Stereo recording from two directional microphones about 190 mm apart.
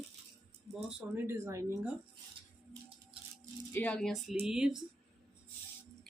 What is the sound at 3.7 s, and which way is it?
Speech, 10° left (ahead or behind).